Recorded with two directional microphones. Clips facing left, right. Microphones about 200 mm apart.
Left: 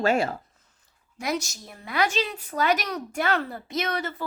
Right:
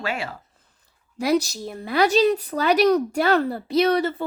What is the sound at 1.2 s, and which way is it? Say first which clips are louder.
Speech: right 8 dB; 35° right (ahead or behind).